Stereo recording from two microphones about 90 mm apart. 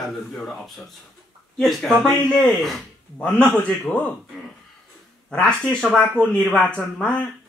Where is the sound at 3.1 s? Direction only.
10° left (ahead or behind).